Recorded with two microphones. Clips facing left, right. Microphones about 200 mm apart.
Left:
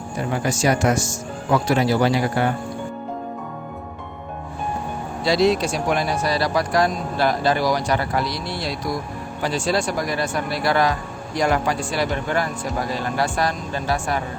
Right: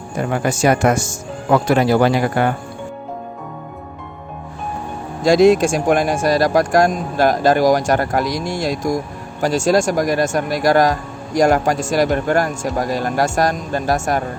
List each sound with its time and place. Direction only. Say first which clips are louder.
0.2 s speech: right 4 dB; 60° right (ahead or behind)
5.2 s speech: right 7 dB; 50° right (ahead or behind)